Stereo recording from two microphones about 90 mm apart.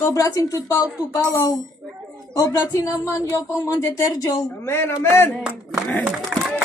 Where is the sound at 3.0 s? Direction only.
35° left (ahead or behind).